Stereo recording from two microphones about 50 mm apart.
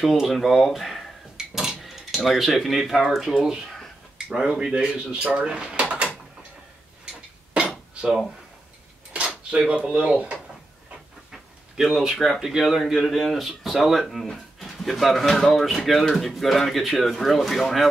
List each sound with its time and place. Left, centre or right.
0.0 s speech: centre; by 5.5 s right
5.8 s a sound: right
7.9 s dishes: centre
9.5 s speech: right
11.3 s a sound: centre
12.0 s speech: centre